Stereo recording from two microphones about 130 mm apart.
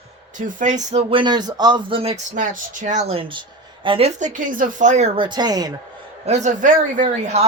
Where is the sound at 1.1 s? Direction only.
35° right (ahead or behind).